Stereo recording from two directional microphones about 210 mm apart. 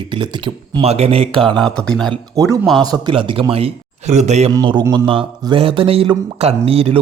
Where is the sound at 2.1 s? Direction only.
15° right (ahead or behind); by 4.5 s 30° right (ahead or behind).